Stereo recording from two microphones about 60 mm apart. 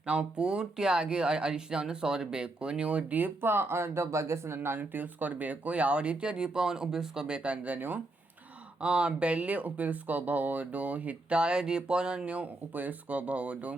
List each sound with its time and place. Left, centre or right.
0.0 s speech: centre; by 4.8 s right
4.8 s speech: right
8.8 s speech: centre